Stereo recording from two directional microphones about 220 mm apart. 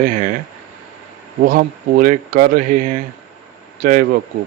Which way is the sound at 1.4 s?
40° right (ahead or behind).